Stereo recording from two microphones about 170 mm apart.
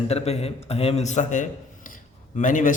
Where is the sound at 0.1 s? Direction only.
40° left (ahead or behind).